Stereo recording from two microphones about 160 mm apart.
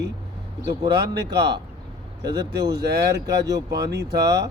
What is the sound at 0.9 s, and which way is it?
Speech, 90° right.